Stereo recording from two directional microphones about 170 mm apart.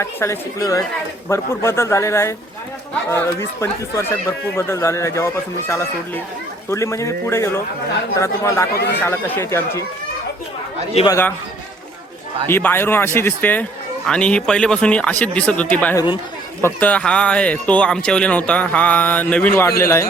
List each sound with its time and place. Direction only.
0.0 s speech: 15° left (ahead or behind)
8.7 s speech: 70° left (ahead or behind)
9.0 s speech: 15° left (ahead or behind)
11.1 s speech: 10° left (ahead or behind)
12.5 s speech: 15° left (ahead or behind)